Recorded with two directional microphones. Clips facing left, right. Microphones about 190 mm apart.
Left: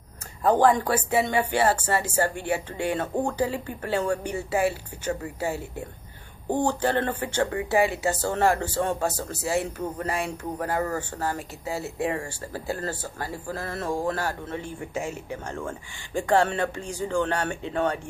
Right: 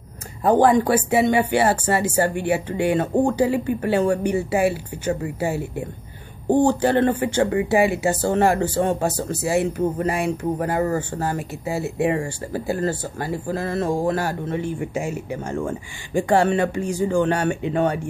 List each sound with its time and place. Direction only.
0.4 s speech: 15° right (ahead or behind)